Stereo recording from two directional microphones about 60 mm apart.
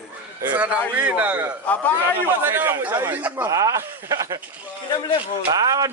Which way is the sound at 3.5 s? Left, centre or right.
Right.